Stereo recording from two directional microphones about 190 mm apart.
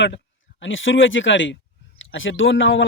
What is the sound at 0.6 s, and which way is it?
Speech, 85° left.